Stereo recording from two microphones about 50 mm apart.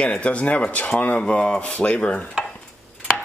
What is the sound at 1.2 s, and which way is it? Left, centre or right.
Speech, left.